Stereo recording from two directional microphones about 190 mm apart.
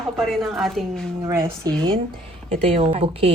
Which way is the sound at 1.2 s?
15° right (ahead or behind).